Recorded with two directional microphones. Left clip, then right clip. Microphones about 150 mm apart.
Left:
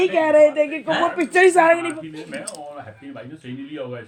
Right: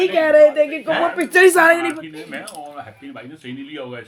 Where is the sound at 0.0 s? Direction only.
55° right (ahead or behind).